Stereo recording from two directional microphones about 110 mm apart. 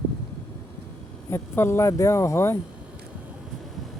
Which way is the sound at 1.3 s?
25° left (ahead or behind).